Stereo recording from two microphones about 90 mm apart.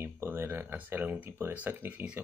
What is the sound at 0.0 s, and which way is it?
Speech, 30° right (ahead or behind).